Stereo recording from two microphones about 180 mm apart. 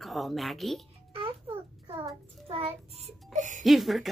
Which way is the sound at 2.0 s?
30° right (ahead or behind).